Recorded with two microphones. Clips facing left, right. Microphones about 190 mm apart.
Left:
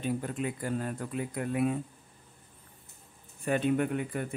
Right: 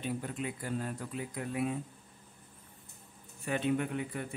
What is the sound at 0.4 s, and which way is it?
Speech, 50° left (ahead or behind).